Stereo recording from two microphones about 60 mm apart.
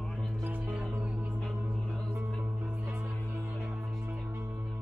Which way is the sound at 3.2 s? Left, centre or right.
Right.